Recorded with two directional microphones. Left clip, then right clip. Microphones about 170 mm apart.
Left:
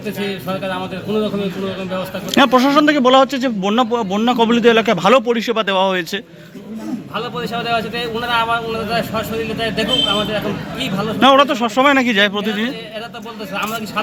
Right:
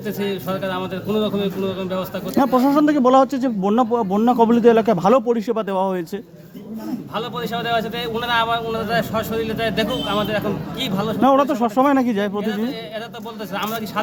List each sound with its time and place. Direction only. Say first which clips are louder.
1.1 s a man's voice: left 2 dB; 25° right (ahead or behind)
7.2 s a man's voice: left 2 dB; centre (ahead or behind)
11.2 s a man's voice: left 5 dB; 25° right (ahead or behind)